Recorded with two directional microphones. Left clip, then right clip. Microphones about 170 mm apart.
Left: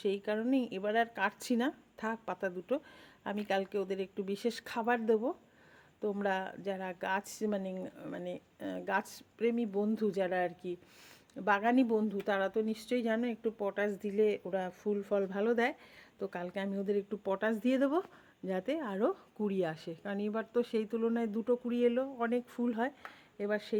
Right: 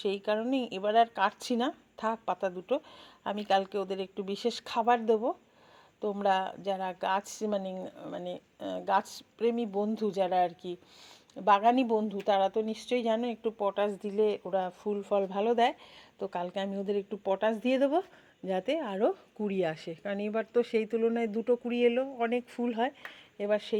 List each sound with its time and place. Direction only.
0.0 s a woman's voice: 15° left (ahead or behind)